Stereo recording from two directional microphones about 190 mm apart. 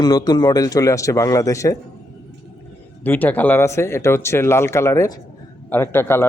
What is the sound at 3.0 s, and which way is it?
Speech, 10° left (ahead or behind).